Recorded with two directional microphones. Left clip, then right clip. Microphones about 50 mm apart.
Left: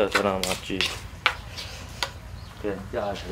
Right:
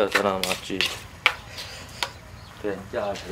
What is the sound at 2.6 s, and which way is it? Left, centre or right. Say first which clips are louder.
Speech: right 1 dB; right.